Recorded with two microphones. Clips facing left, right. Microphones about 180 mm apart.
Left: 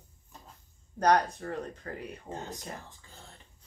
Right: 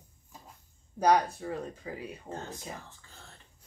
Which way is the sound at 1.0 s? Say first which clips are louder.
Even; 5° right (ahead or behind).